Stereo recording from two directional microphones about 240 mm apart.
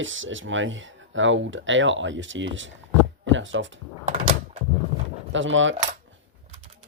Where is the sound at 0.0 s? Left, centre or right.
Right.